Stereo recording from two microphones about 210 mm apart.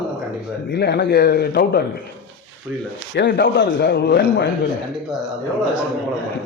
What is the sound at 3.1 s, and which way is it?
A man's voice, 50° left (ahead or behind).